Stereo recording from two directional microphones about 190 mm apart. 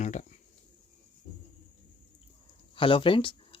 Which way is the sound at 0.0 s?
40° left (ahead or behind).